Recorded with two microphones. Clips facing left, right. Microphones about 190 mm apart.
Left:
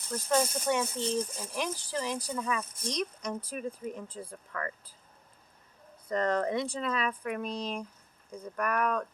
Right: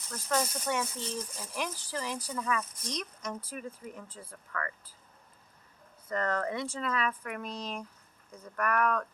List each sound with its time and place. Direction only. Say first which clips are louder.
0.3 s speech: left 3 dB; 25° left (ahead or behind)
6.1 s speech: left 3 dB; 15° left (ahead or behind)